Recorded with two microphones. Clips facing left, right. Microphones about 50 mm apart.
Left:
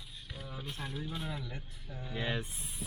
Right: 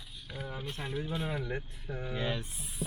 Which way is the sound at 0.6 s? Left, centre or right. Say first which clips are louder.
Right 2 dB; right.